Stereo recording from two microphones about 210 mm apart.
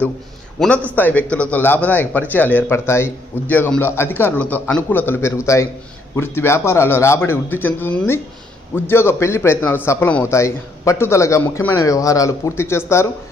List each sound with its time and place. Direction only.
0.6 s a man's voice: centre (ahead or behind)